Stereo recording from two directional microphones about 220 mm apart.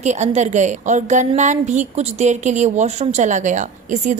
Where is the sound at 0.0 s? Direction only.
30° right (ahead or behind).